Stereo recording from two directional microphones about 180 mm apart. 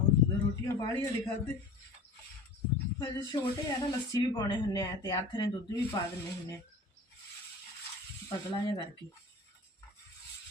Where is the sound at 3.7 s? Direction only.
20° left (ahead or behind).